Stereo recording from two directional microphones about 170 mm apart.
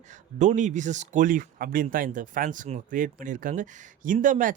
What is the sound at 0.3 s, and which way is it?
Speech, 45° right (ahead or behind).